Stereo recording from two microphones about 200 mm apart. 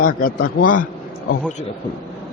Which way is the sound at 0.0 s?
45° left (ahead or behind).